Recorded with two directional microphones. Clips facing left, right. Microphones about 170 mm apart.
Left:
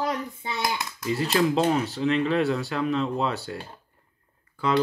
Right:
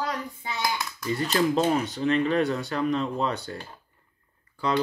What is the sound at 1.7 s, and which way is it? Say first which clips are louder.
Speech: even; 5° left (ahead or behind).